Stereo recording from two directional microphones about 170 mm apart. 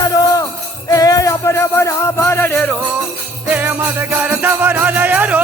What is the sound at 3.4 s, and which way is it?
Jingle bell, 10° right (ahead or behind).